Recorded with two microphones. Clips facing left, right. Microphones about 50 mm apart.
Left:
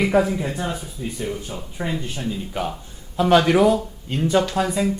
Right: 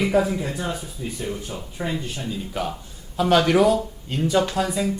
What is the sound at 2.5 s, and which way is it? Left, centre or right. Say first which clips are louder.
Speech: left 1 dB; centre.